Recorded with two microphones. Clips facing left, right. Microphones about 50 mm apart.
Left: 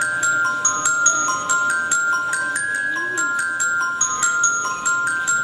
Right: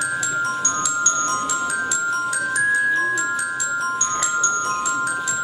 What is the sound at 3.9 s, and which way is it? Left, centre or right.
Glockenspiel, left.